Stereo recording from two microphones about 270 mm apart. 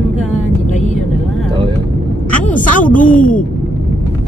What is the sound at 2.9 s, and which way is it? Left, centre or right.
Speech, left.